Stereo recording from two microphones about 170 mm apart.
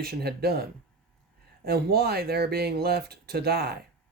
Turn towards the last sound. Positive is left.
turn(degrees=-70)  # may be behind; listen again after turning